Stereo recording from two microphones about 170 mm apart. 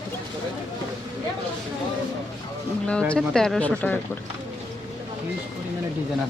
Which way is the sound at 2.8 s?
5° left (ahead or behind).